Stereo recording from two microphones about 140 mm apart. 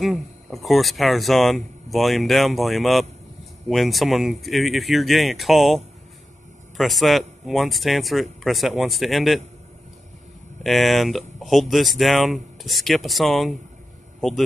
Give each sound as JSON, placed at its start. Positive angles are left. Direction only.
{"t": 0.0, "sound": "speech", "side_deg": 0}
{"t": 6.8, "sound": "speech", "side_deg": 0}
{"t": 10.6, "sound": "speech", "side_deg": 0}